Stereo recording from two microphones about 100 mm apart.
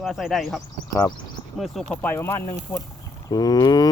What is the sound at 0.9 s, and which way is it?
Speech, 35° left (ahead or behind).